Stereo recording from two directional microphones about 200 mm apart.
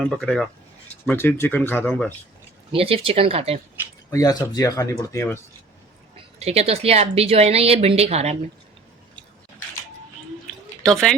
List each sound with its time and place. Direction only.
0.0 s speech: 5° left (ahead or behind)
2.7 s speech: 30° right (ahead or behind)
4.1 s speech: 20° left (ahead or behind)
6.4 s a woman's voice: 30° right (ahead or behind)
10.4 s drip: centre (ahead or behind)